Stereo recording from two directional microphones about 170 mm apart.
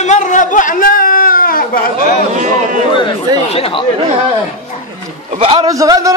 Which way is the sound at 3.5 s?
35° left (ahead or behind).